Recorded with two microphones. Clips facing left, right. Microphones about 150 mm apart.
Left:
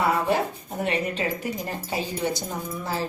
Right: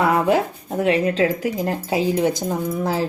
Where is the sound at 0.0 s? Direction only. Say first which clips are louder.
Right 5 dB; 90° right.